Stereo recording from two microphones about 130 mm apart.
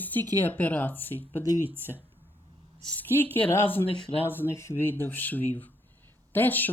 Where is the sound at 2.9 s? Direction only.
15° left (ahead or behind).